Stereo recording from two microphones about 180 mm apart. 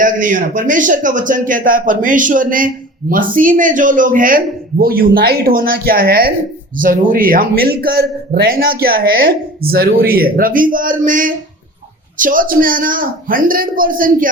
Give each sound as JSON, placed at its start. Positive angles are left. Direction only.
{"t": 0.0, "sound": "a man's voice", "side_deg": -45}